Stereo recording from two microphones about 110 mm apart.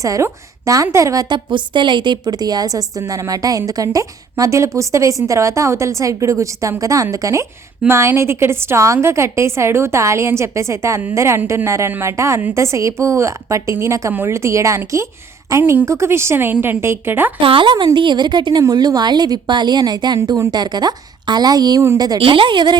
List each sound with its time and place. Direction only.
0.0 s a woman's voice: 30° right (ahead or behind)
12.4 s a woman's voice: 15° right (ahead or behind)
12.6 s a woman's voice: 25° right (ahead or behind)
17.4 s a woman's voice: 50° right (ahead or behind)
22.2 s a woman's voice: 50° right (ahead or behind)